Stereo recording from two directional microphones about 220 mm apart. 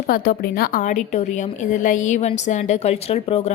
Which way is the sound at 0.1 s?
40° left (ahead or behind).